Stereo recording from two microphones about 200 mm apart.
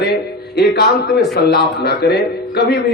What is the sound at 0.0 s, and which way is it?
A man's voice, 55° left (ahead or behind).